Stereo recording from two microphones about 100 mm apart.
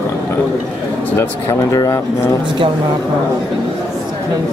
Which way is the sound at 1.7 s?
35° left (ahead or behind).